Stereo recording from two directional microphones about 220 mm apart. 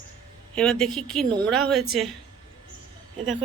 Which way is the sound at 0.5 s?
5° left (ahead or behind).